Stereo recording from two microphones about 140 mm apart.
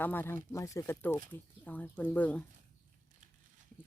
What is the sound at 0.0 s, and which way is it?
Speech, 15° left (ahead or behind).